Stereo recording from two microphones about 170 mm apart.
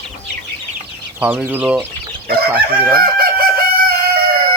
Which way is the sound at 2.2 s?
65° right (ahead or behind).